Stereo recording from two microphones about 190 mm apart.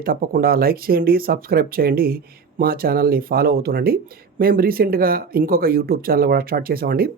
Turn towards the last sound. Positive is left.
turn(degrees=-50)  # may be behind; listen again after turning